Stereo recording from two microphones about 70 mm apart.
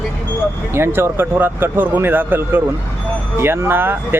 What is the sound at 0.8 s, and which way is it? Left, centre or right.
Speech, right.